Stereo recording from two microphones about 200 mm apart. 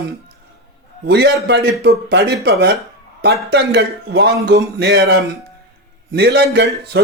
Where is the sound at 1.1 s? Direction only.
55° right (ahead or behind).